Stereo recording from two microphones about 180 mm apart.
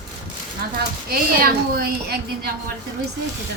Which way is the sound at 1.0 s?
55° right (ahead or behind).